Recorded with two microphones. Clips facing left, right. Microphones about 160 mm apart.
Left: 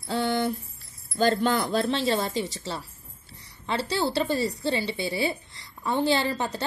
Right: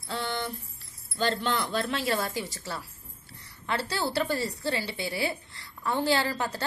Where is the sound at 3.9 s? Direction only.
20° left (ahead or behind).